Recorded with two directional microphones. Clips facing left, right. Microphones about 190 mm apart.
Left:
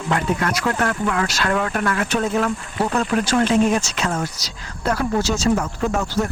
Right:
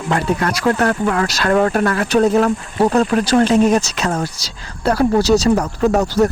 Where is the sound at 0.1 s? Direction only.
35° right (ahead or behind).